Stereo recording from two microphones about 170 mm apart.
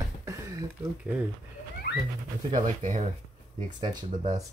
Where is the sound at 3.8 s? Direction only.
25° right (ahead or behind).